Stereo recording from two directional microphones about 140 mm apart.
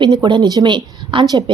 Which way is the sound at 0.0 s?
35° right (ahead or behind).